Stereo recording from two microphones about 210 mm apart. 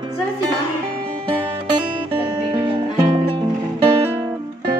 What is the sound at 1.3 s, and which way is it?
Music, 25° right (ahead or behind).